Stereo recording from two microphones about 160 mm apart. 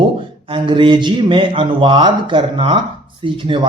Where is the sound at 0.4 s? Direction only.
30° right (ahead or behind).